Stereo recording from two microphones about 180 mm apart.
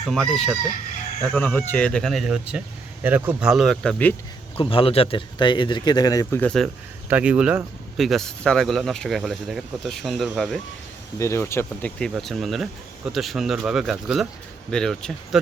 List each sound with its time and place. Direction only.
0.1 s speech: centre (ahead or behind)
4.5 s speech: 30° left (ahead or behind)
6.4 s speech: 5° left (ahead or behind)
7.1 s speech: 5° right (ahead or behind)
11.2 s speech: 15° left (ahead or behind)
11.9 s speech: centre (ahead or behind)